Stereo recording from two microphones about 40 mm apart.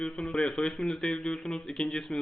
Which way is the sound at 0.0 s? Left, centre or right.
Left.